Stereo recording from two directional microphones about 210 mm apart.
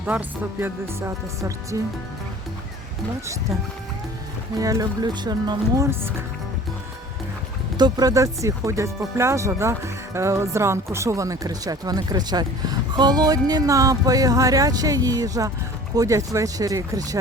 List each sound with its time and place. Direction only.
0.0 s speech: 5° right (ahead or behind)
4.5 s speech: 15° right (ahead or behind)
7.8 s speech: 20° right (ahead or behind)